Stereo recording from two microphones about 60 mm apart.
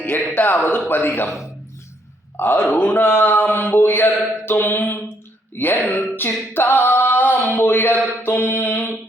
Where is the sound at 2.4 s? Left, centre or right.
Left.